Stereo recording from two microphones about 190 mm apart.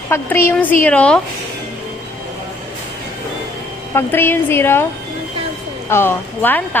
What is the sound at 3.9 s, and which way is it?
Speech, 10° left (ahead or behind).